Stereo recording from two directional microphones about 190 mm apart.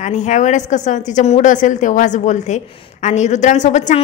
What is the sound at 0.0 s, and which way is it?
A woman's voice, 40° left (ahead or behind).